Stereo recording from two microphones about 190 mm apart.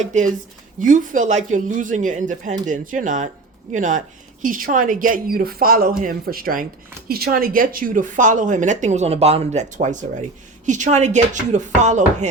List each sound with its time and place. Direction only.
0.0 s speech: 40° right (ahead or behind)